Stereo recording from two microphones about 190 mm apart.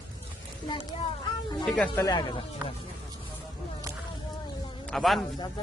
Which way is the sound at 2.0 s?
20° left (ahead or behind).